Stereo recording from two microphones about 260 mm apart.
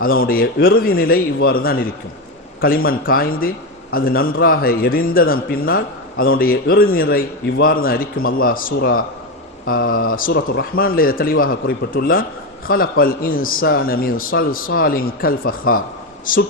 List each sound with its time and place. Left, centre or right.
0.0 s a man's voice: left